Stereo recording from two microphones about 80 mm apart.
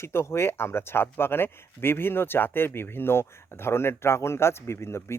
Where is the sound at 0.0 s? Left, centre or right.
Left.